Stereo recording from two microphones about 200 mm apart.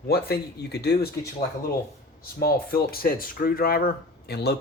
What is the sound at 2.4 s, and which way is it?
Speech, 50° left (ahead or behind).